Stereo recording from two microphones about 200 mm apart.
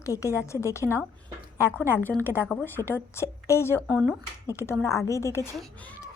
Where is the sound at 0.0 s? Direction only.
15° left (ahead or behind).